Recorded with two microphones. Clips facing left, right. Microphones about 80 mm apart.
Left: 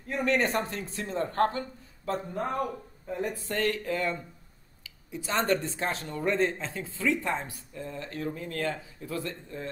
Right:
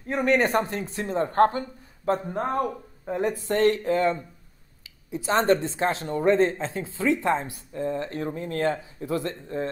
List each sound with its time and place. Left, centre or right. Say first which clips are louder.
0.3 s speech: right 5 dB; right